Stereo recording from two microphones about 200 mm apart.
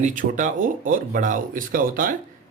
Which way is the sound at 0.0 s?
40° right (ahead or behind).